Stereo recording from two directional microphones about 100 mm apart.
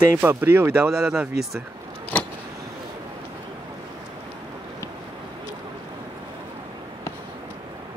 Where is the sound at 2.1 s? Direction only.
15° left (ahead or behind).